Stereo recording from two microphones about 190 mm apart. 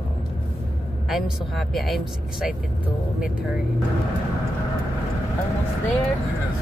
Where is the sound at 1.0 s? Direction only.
Centre (ahead or behind).